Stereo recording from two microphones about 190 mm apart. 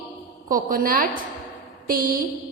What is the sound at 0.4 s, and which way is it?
A woman's voice, 45° right (ahead or behind).